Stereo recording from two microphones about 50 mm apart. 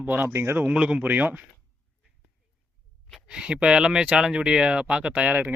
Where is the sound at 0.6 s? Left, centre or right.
Right.